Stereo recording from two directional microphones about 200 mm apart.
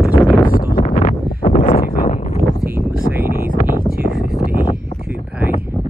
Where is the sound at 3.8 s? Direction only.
50° right (ahead or behind).